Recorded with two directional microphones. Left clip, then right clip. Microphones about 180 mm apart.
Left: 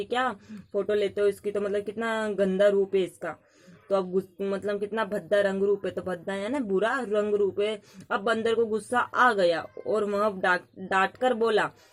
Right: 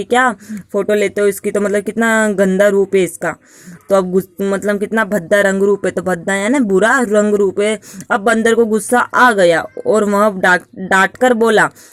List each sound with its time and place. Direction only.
0.0 s speech: 45° right (ahead or behind)